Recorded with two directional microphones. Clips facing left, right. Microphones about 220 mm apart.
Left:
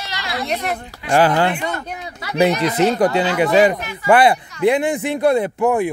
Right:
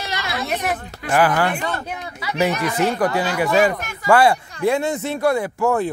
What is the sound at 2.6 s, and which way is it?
Speech, 20° left (ahead or behind).